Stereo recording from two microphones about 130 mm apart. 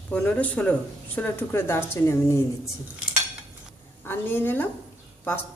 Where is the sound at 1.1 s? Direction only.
15° left (ahead or behind).